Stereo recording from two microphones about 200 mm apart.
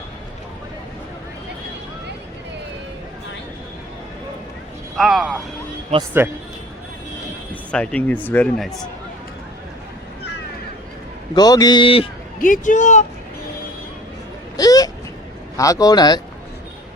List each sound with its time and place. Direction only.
4.9 s speech: centre (ahead or behind)
7.7 s speech: 5° left (ahead or behind)
11.3 s a man's voice: 20° left (ahead or behind)
12.4 s speech: 40° left (ahead or behind)
14.5 s vehicle: 20° left (ahead or behind)
15.5 s a man's voice: 15° left (ahead or behind)